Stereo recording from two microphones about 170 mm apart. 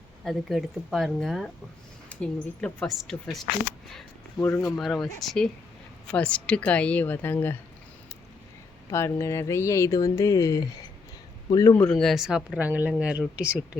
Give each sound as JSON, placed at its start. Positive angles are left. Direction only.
{"t": 0.3, "sound": "speech", "side_deg": 0}
{"t": 4.4, "sound": "a woman's voice", "side_deg": 15}
{"t": 4.8, "sound": "a woman's voice", "side_deg": 0}
{"t": 8.9, "sound": "speech", "side_deg": 15}
{"t": 11.8, "sound": "speech", "side_deg": 5}